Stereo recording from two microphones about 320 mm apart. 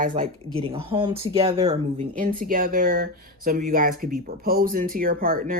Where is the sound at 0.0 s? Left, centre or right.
Right.